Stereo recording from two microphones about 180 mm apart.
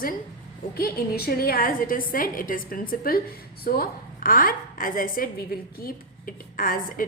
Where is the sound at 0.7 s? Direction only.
55° left (ahead or behind).